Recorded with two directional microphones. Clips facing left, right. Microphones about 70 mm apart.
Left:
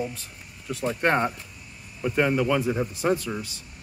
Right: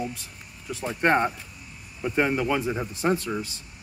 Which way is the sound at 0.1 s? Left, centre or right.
Centre.